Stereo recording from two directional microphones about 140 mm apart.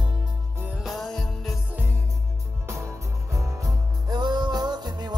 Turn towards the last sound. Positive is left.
turn(degrees=-30)  # may be behind; listen again after turning